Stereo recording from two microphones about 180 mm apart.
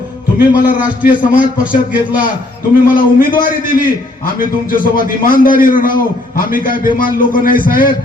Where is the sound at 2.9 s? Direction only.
50° left (ahead or behind).